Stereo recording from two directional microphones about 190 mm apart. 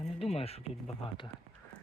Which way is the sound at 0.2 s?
30° left (ahead or behind).